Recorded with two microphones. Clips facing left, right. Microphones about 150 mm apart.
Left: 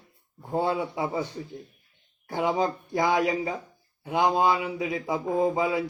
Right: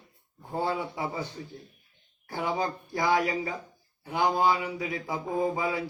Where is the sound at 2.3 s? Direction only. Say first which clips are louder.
Left 4 dB; 20° left (ahead or behind).